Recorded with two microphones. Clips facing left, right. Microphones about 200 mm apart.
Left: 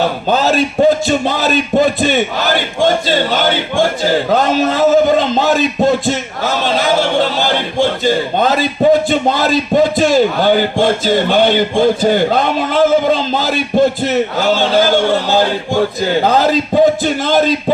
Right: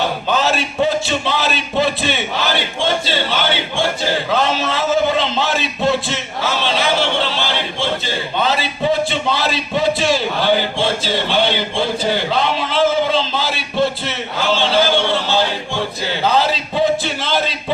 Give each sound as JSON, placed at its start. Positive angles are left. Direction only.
{"t": 0.3, "sound": "speech", "side_deg": 40}